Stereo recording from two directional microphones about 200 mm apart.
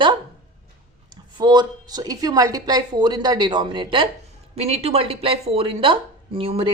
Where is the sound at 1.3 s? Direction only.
20° right (ahead or behind).